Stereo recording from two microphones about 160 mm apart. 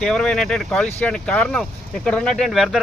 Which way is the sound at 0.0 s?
5° left (ahead or behind).